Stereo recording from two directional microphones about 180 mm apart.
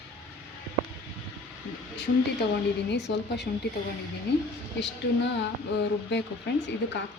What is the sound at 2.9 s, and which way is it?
Speech, 70° left (ahead or behind).